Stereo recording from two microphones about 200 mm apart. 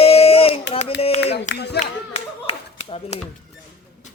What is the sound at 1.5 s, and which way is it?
Speech, 60° left (ahead or behind).